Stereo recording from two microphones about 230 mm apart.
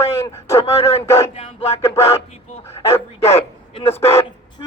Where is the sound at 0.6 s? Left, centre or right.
Left.